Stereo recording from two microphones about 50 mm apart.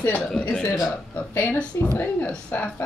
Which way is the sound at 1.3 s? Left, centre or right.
Left.